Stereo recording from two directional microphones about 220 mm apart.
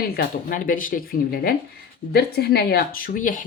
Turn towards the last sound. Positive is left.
turn(degrees=40)  # may be behind; listen again after turning